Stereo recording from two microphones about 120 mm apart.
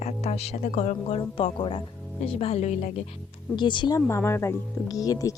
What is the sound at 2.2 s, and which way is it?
Speech, 55° left (ahead or behind).